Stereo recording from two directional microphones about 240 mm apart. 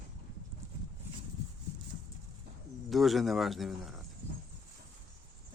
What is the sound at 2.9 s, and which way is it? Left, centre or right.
Speech, centre.